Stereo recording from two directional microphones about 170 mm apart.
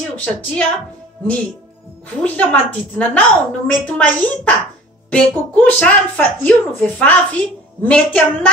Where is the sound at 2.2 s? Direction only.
10° left (ahead or behind).